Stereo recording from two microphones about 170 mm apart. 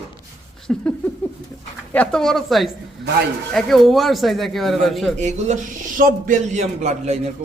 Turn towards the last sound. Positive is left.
turn(degrees=-40)  # may be behind; listen again after turning